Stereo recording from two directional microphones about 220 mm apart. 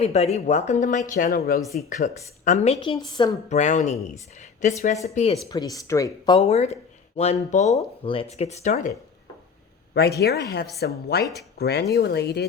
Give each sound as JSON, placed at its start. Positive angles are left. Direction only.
{"t": 0.0, "sound": "speech", "side_deg": 30}
{"t": 3.5, "sound": "speech", "side_deg": 35}
{"t": 5.5, "sound": "speech", "side_deg": 15}
{"t": 9.9, "sound": "speech", "side_deg": 45}